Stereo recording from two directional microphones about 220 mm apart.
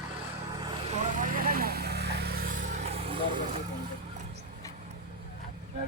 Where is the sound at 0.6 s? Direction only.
30° right (ahead or behind).